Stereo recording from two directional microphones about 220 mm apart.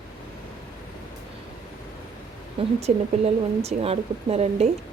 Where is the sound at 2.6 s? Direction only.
25° right (ahead or behind).